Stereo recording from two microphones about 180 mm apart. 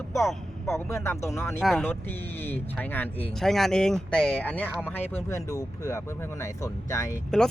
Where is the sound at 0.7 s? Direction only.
15° left (ahead or behind).